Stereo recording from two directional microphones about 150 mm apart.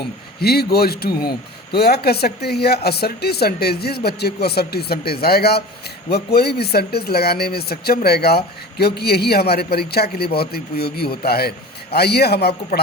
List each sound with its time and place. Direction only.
0.0 s speech: 90° left